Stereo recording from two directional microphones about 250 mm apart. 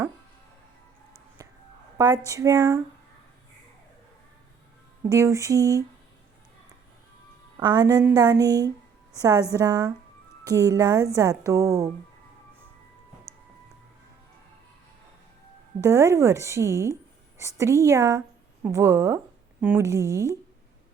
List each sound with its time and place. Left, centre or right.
1.4 s a sound: centre
2.0 s speech: centre
5.0 s speech: centre
7.5 s speech: centre
15.8 s speech: centre